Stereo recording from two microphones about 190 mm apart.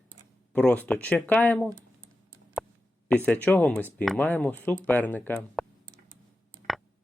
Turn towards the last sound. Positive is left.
turn(degrees=0)  # may be behind; listen again after turning